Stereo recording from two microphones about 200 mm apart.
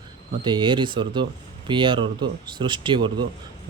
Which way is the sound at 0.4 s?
25° right (ahead or behind).